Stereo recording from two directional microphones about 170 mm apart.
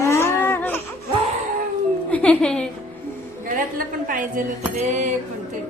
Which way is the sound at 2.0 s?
10° left (ahead or behind).